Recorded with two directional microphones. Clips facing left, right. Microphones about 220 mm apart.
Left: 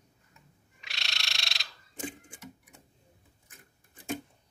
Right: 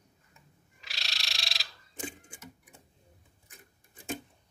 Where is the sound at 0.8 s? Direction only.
Centre (ahead or behind).